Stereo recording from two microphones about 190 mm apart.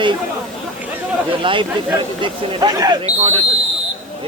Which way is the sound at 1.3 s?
25° right (ahead or behind).